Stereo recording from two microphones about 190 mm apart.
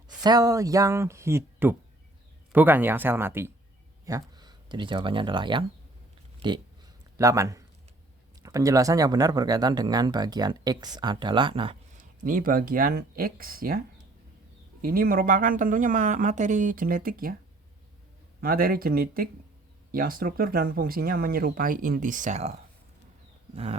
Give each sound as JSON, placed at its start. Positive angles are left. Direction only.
{"t": 0.2, "sound": "speech", "side_deg": -20}
{"t": 7.2, "sound": "speech", "side_deg": -15}
{"t": 12.2, "sound": "speech", "side_deg": -45}
{"t": 18.3, "sound": "speech", "side_deg": -50}